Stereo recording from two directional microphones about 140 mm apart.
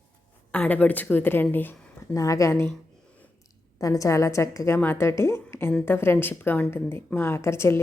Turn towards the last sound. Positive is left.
turn(degrees=20)  # may be behind; listen again after turning